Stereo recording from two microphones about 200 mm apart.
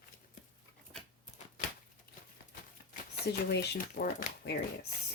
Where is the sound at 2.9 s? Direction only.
55° left (ahead or behind).